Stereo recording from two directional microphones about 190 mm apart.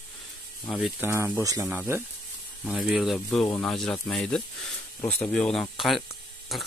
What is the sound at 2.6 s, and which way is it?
Speech, centre (ahead or behind).